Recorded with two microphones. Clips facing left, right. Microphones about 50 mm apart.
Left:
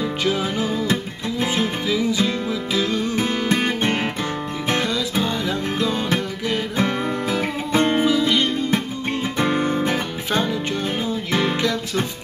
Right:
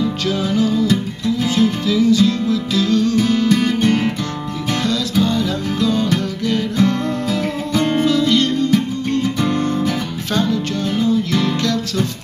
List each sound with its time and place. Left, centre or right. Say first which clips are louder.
0.0 s music: right 2 dB; centre